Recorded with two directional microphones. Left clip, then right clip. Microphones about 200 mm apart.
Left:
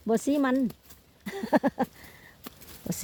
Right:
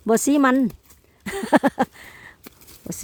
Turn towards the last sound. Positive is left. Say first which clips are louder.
# right 2 dB
turn(degrees=-10)  # may be behind; listen again after turning